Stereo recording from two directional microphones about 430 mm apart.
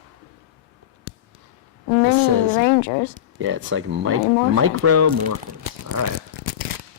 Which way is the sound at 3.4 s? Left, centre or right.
Right.